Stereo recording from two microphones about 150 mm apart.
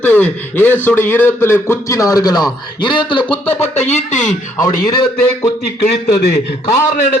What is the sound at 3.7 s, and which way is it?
Speech, 50° left (ahead or behind).